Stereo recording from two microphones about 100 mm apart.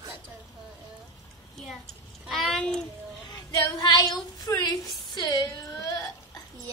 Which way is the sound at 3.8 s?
40° left (ahead or behind).